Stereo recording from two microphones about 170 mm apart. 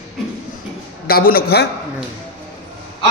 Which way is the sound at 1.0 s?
60° left (ahead or behind).